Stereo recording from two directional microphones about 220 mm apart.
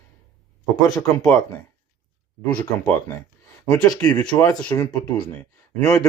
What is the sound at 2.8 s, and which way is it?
Speech, 15° left (ahead or behind).